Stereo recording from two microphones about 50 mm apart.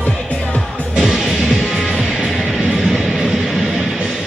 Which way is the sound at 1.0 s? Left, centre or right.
Centre.